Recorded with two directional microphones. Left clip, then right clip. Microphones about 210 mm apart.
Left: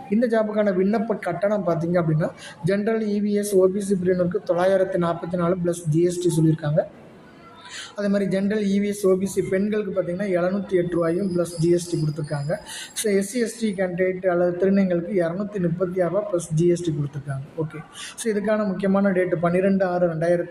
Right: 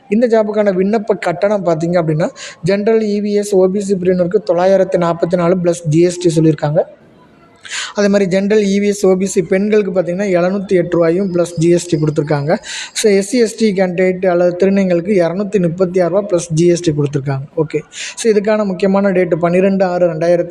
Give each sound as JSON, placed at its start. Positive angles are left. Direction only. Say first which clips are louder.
{"t": 0.1, "sound": "a man's voice", "louder": "right 9 dB", "side_deg": -35}
{"t": 7.8, "sound": "a man's voice", "louder": "right 12 dB", "side_deg": -40}